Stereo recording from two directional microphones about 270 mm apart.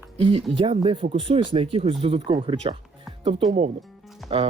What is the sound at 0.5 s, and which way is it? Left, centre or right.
Speech, centre.